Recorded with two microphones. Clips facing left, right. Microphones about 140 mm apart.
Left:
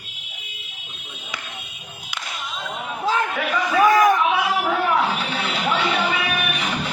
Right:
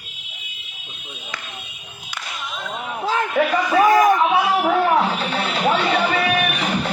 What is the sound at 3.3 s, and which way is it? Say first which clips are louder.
Speech: right 7 dB; 40° right (ahead or behind).